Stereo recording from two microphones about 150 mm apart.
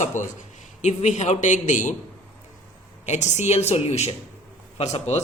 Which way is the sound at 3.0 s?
50° left (ahead or behind).